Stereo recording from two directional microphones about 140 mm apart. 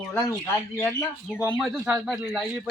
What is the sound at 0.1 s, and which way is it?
Speech, 20° left (ahead or behind).